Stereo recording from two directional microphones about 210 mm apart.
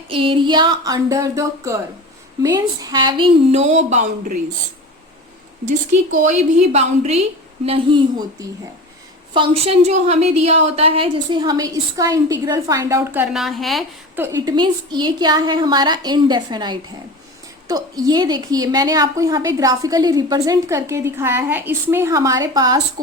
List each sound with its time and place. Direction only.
0.1 s a woman's voice: 25° right (ahead or behind)
6.2 s a woman's voice: 30° right (ahead or behind)
9.3 s a woman's voice: 25° right (ahead or behind); by 13.8 s centre (ahead or behind)
14.2 s a woman's voice: 15° right (ahead or behind)